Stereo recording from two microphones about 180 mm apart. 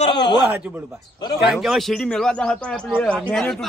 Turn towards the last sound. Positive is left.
turn(degrees=0)  # may be behind; listen again after turning